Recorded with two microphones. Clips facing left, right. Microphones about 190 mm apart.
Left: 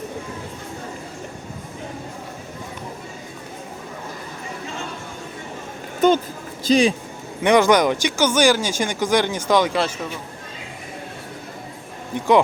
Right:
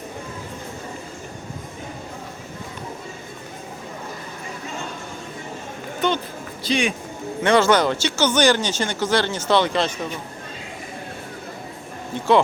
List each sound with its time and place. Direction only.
6.7 s speech: 35° left (ahead or behind)
7.4 s speech: 15° left (ahead or behind)
12.1 s speech: 15° left (ahead or behind)